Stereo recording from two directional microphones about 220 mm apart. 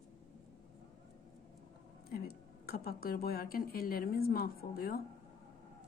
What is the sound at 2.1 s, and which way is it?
Speech, 45° left (ahead or behind).